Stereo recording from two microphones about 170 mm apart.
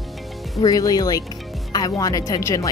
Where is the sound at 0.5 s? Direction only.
20° left (ahead or behind).